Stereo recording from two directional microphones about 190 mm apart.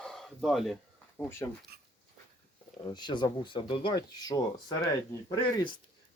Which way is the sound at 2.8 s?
20° left (ahead or behind).